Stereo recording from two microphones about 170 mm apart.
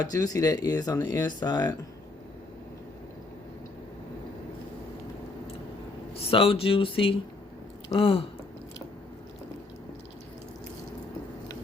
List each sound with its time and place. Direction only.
0.0 s speech: 20° left (ahead or behind)
6.3 s speech: 35° left (ahead or behind)